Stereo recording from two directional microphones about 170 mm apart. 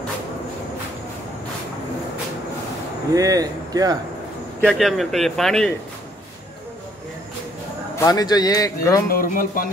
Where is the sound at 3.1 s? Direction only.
20° right (ahead or behind).